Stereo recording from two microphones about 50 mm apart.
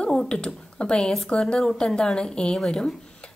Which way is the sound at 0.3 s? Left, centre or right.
Centre.